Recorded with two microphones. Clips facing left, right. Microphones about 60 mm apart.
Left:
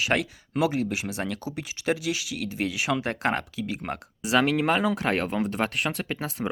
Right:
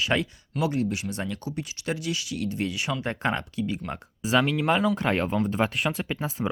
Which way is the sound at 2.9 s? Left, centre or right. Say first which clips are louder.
Left 4 dB; left.